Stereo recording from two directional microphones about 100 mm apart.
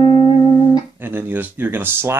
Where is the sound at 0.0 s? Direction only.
50° left (ahead or behind).